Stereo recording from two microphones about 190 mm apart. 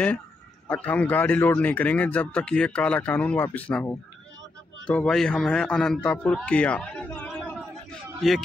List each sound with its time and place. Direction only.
0.7 s a man's voice: 10° left (ahead or behind)